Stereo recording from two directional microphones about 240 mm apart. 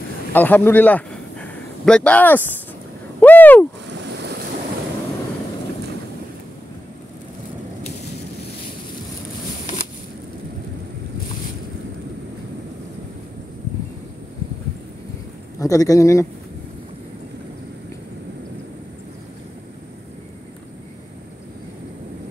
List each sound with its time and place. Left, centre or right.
0.3 s a man's voice: centre
3.2 s a sound: centre
15.6 s speech: centre